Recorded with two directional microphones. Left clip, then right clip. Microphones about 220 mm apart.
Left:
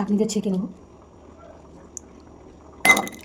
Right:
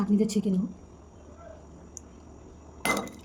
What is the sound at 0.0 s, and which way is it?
Speech, 20° right (ahead or behind).